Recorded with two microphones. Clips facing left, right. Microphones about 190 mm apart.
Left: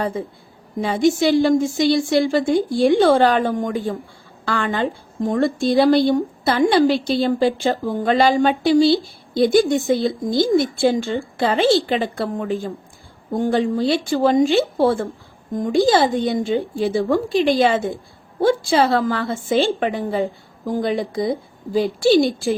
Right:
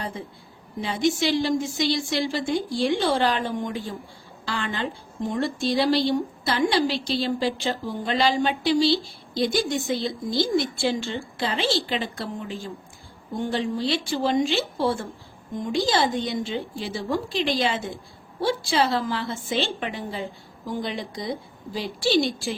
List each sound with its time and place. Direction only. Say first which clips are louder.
0.0 s a woman's voice: left 9 dB; 50° left (ahead or behind)